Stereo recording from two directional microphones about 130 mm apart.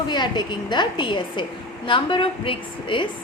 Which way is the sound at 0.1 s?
35° left (ahead or behind).